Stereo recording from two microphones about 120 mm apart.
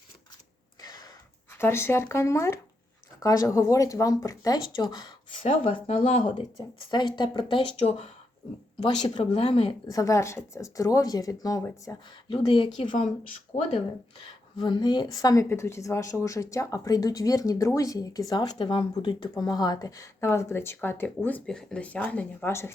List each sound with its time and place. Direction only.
0.8 s a sound: 35° left (ahead or behind)
1.5 s speech: 20° left (ahead or behind)
5.4 s speech: 55° left (ahead or behind)
6.6 s speech: 35° left (ahead or behind)
7.8 s speech: 60° left (ahead or behind)
8.8 s speech: 40° left (ahead or behind)
9.3 s speech: 50° left (ahead or behind)
9.8 s speech: 30° left (ahead or behind)
12.3 s speech: 50° left (ahead or behind)
12.9 s speech: 90° left
13.5 s speech: 55° left (ahead or behind)
14.5 s speech: 40° left (ahead or behind); by 22.7 s 20° left (ahead or behind)